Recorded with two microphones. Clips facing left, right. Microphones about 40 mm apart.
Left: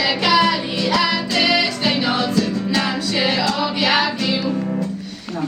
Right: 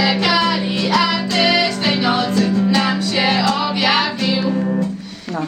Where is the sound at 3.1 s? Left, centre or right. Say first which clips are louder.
Right 2 dB; centre.